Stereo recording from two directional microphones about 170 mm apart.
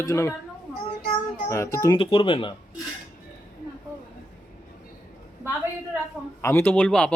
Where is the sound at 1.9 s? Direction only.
30° left (ahead or behind).